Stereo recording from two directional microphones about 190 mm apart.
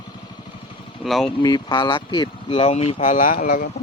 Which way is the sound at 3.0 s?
45° left (ahead or behind).